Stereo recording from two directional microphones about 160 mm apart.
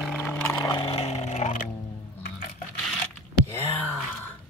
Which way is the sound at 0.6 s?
25° left (ahead or behind).